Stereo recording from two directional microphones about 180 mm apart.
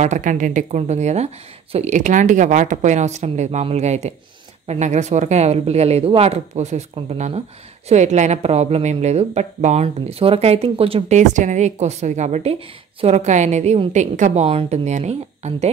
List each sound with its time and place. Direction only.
0.0 s speech: 45° right (ahead or behind)